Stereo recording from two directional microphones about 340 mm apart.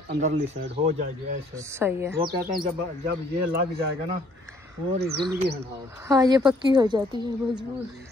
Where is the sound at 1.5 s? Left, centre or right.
Centre.